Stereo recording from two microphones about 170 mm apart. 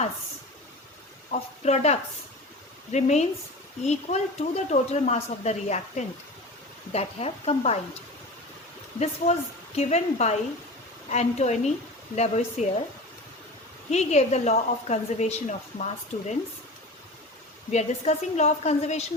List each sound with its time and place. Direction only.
1.3 s a woman's voice: 40° left (ahead or behind)
9.0 s a woman's voice: 40° left (ahead or behind)
13.9 s a woman's voice: 40° left (ahead or behind)
17.7 s a woman's voice: 40° left (ahead or behind)